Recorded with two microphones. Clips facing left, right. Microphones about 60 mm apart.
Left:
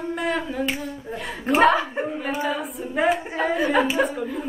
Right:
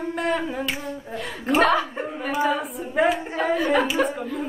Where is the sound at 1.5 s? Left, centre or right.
Centre.